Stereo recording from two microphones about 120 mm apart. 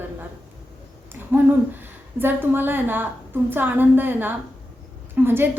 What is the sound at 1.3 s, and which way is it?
A woman's voice, 15° right (ahead or behind).